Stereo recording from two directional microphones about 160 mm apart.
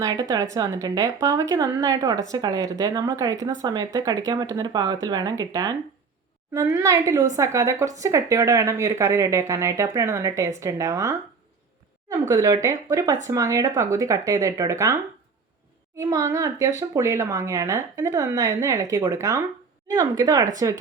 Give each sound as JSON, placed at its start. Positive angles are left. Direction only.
{"t": 0.0, "sound": "speech", "side_deg": -20}
{"t": 12.3, "sound": "speech", "side_deg": -20}
{"t": 16.0, "sound": "speech", "side_deg": -20}